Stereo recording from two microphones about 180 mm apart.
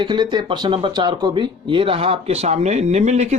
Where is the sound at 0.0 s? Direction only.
25° right (ahead or behind).